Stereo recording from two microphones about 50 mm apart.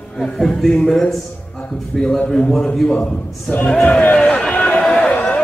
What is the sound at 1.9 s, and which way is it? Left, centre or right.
Speech, centre.